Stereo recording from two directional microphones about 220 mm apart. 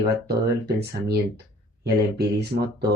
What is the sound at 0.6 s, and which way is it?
Speech, 50° right (ahead or behind).